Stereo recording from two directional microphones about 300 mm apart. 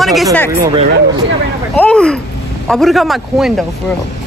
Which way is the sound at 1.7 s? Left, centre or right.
Centre.